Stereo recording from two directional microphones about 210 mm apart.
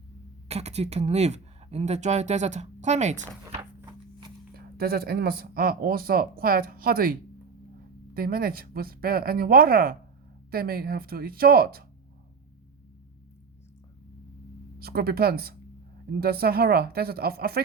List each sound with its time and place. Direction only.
0.4 s speech: 30° right (ahead or behind)
4.5 s speech: 45° right (ahead or behind)
14.8 s speech: 45° right (ahead or behind)